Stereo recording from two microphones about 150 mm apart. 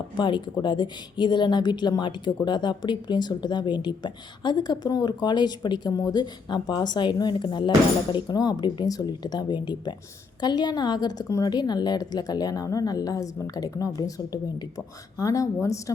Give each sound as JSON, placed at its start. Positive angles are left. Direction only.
{"t": 0.2, "sound": "a woman's voice", "side_deg": 30}